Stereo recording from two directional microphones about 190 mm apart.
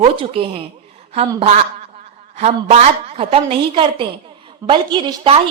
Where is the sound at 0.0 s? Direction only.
30° right (ahead or behind).